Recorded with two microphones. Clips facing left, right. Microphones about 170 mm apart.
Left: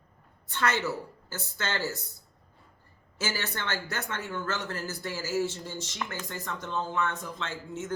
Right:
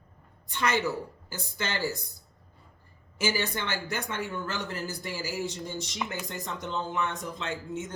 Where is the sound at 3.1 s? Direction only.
15° right (ahead or behind).